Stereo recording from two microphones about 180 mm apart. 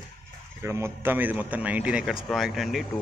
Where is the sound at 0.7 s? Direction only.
15° right (ahead or behind).